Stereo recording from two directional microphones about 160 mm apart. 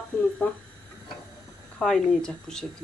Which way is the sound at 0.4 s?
10° left (ahead or behind).